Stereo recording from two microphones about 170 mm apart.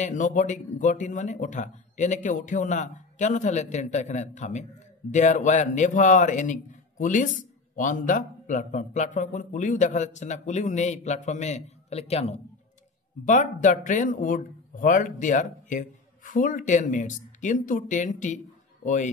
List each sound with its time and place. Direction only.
0.0 s speech: 45° left (ahead or behind)